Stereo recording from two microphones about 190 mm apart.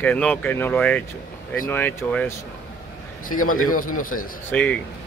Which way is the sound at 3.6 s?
45° left (ahead or behind).